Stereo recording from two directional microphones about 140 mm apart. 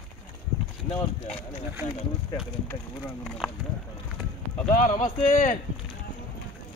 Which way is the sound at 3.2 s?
5° left (ahead or behind).